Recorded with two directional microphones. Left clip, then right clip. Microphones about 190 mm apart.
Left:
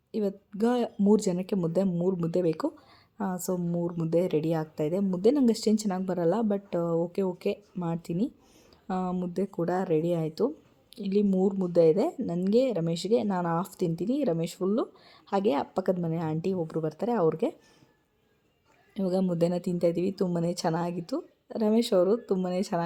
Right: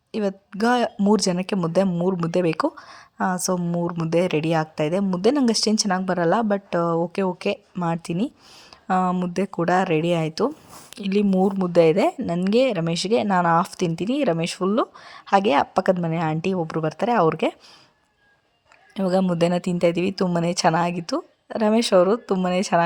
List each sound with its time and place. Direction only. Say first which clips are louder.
0.1 s speech: right 5 dB; 15° right (ahead or behind)
18.9 s speech: right 7 dB; 15° right (ahead or behind)